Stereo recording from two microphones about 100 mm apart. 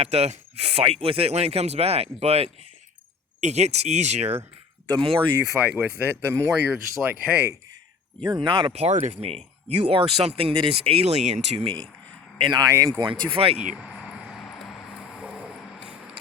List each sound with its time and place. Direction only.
0.0 s speech: 90° right
3.5 s speech: 90° right
4.9 s speech: 55° right (ahead or behind)
5.6 s speech: 15° right (ahead or behind)
8.2 s speech: 50° right (ahead or behind)
8.7 s speech: 90° right
11.5 s speech: 60° right (ahead or behind)
12.5 s speech: 35° right (ahead or behind)
13.0 s speech: 50° right (ahead or behind)
13.6 s a sound: 10° right (ahead or behind)